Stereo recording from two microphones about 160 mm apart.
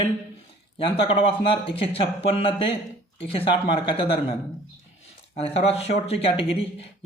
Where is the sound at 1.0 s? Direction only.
35° left (ahead or behind).